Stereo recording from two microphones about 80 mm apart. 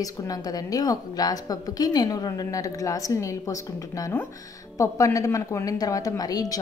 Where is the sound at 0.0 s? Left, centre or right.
Left.